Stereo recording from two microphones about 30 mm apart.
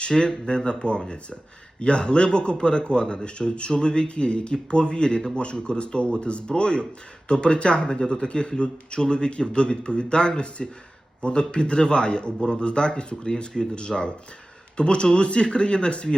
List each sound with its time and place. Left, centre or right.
0.3 s speech: left